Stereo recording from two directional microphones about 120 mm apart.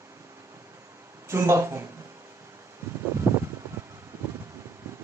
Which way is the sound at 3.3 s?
15° right (ahead or behind).